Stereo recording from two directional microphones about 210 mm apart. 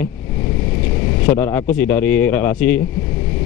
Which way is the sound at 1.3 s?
10° left (ahead or behind).